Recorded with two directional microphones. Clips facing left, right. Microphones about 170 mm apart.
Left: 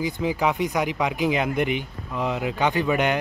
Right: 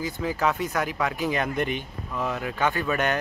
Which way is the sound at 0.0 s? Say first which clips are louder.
Left 2 dB; 15° left (ahead or behind).